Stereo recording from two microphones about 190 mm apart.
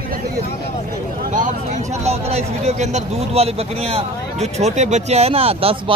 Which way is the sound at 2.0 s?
35° right (ahead or behind).